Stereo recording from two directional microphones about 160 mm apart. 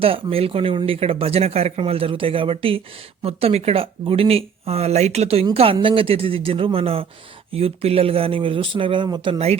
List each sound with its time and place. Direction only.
0.0 s speech: 35° right (ahead or behind)